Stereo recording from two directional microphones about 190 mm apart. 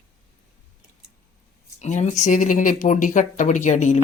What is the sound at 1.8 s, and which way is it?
Speech, 40° left (ahead or behind).